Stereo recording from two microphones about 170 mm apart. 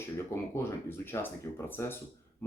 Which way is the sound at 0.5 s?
15° left (ahead or behind).